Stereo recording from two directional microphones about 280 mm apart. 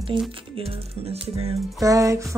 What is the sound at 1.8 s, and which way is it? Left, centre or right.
Music, centre.